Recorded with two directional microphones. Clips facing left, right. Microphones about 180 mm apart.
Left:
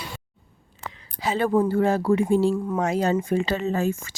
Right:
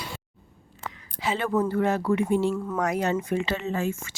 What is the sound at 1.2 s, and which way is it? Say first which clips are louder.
Speech: left 4 dB; 35° left (ahead or behind).